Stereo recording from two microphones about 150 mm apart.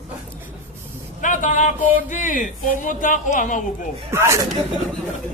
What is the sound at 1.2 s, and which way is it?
Speech, 60° left (ahead or behind).